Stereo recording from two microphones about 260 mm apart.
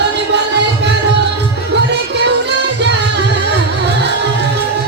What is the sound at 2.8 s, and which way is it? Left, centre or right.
Music, right.